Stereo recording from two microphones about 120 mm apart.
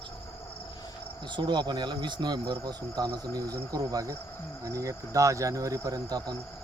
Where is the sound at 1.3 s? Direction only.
40° right (ahead or behind).